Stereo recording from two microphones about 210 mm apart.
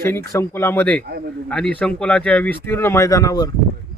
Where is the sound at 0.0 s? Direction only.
10° left (ahead or behind).